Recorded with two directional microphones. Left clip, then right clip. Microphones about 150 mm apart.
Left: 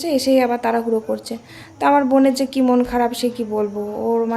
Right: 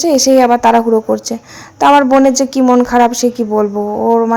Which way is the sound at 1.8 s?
30° right (ahead or behind).